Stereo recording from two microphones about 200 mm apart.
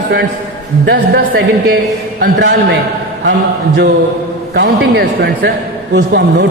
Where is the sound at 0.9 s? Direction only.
50° right (ahead or behind).